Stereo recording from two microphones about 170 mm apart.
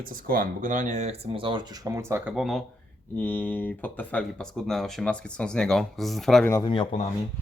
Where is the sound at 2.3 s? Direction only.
Centre (ahead or behind).